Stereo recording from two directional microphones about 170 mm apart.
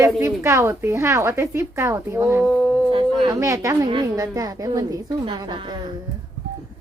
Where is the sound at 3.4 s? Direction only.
20° right (ahead or behind).